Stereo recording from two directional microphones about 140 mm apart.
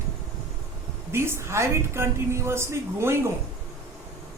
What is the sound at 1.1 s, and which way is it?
A woman's voice, 15° right (ahead or behind).